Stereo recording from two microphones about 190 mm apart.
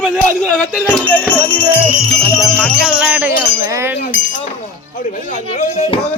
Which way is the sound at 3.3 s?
10° right (ahead or behind).